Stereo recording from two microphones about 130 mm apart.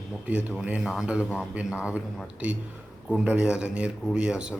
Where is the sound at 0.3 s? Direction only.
10° right (ahead or behind).